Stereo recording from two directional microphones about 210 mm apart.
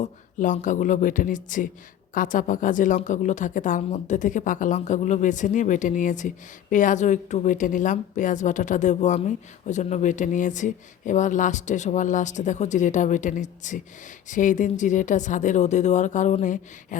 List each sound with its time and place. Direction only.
0.0 s a woman's voice: 35° left (ahead or behind)